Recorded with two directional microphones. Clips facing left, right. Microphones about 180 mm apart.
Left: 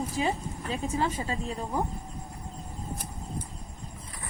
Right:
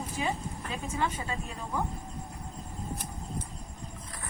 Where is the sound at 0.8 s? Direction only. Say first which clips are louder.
Left 3 dB; 35° left (ahead or behind).